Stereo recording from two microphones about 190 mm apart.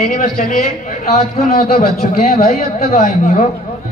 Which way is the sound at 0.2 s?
50° left (ahead or behind).